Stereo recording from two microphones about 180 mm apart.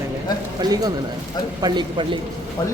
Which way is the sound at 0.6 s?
20° right (ahead or behind).